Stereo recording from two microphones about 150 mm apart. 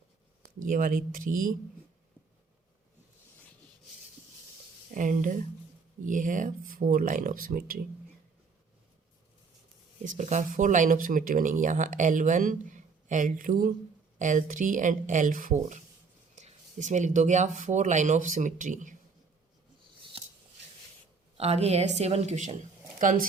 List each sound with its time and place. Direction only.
0.6 s speech: 65° right (ahead or behind)
4.9 s speech: 60° right (ahead or behind)
10.0 s speech: 55° right (ahead or behind)
20.1 s a sound: 40° right (ahead or behind)
21.3 s a woman's voice: 45° right (ahead or behind); by 23.2 s 60° right (ahead or behind)